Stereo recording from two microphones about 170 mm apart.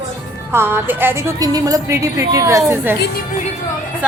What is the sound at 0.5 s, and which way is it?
A woman's voice, 15° right (ahead or behind).